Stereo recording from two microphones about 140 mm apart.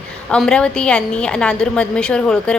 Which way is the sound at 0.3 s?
5° left (ahead or behind).